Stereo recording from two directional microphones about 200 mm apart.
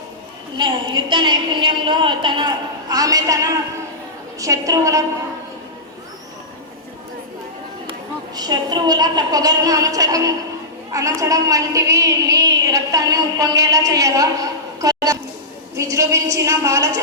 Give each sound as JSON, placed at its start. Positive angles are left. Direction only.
{"t": 0.5, "sound": "a woman's voice", "side_deg": -25}
{"t": 8.4, "sound": "a woman's voice", "side_deg": -20}
{"t": 14.8, "sound": "a sound", "side_deg": -15}
{"t": 15.7, "sound": "a woman's voice", "side_deg": -15}